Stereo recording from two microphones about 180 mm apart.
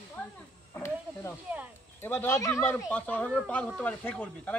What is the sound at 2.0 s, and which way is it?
Speech, 10° left (ahead or behind).